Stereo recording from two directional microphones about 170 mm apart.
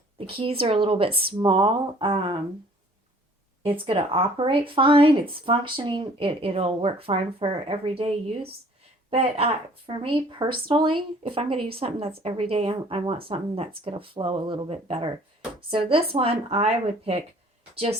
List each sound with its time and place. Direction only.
0.3 s speech: 35° right (ahead or behind)
3.6 s speech: 30° right (ahead or behind)